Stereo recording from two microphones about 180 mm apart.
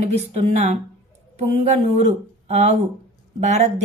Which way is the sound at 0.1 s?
35° right (ahead or behind).